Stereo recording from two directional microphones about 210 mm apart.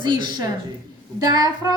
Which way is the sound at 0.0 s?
20° right (ahead or behind).